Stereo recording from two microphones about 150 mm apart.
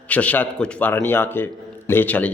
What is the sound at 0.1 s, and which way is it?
A man's voice, 10° left (ahead or behind).